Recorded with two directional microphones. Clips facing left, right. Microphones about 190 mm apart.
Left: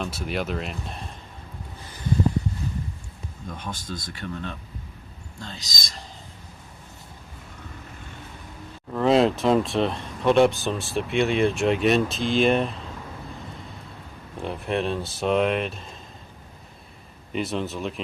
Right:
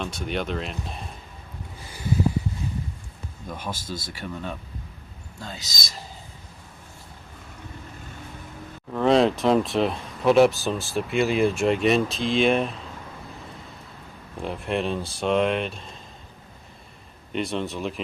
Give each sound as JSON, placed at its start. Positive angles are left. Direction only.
{"t": 0.0, "sound": "speech", "side_deg": 5}
{"t": 3.6, "sound": "speech", "side_deg": -5}
{"t": 8.9, "sound": "speech", "side_deg": 0}
{"t": 14.3, "sound": "speech", "side_deg": 0}
{"t": 17.3, "sound": "speech", "side_deg": 0}